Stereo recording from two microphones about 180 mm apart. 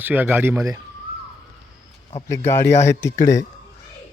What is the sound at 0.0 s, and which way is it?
Speech, 10° right (ahead or behind).